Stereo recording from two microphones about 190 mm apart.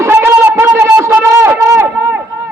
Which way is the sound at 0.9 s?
15° right (ahead or behind).